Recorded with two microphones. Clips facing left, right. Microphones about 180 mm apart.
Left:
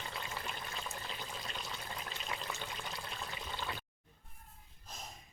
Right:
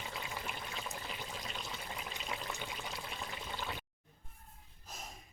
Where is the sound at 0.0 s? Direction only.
5° right (ahead or behind).